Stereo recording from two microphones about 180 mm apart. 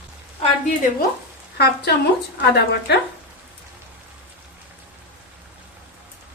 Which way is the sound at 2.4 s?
65° left (ahead or behind).